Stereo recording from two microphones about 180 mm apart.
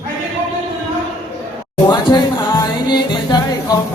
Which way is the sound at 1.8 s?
25° left (ahead or behind).